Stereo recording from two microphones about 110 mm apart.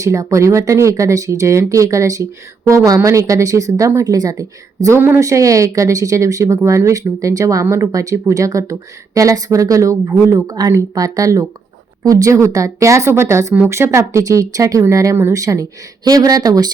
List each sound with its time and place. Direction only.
0.0 s speech: 30° right (ahead or behind)
4.9 s speech: 20° right (ahead or behind)